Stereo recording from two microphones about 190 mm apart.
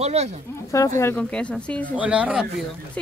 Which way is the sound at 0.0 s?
35° right (ahead or behind).